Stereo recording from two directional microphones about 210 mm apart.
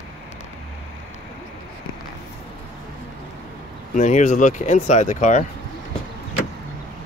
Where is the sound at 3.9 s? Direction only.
35° left (ahead or behind).